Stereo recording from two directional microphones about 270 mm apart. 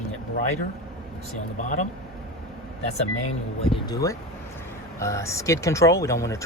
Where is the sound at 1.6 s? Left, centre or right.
Left.